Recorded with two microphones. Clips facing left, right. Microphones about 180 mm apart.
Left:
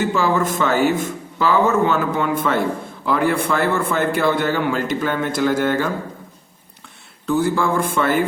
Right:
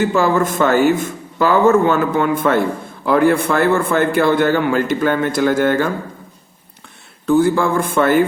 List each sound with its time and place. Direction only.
0.1 s a man's voice: 50° right (ahead or behind)
7.3 s a man's voice: 50° right (ahead or behind)